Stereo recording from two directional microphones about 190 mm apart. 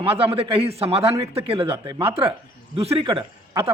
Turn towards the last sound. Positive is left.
turn(degrees=-25)  # may be behind; listen again after turning